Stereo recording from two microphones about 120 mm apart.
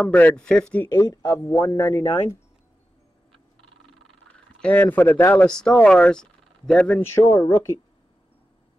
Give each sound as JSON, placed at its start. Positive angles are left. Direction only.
{"t": 0.0, "sound": "speech", "side_deg": 15}
{"t": 0.8, "sound": "speech", "side_deg": 30}
{"t": 4.3, "sound": "speech", "side_deg": 10}
{"t": 7.0, "sound": "speech", "side_deg": 20}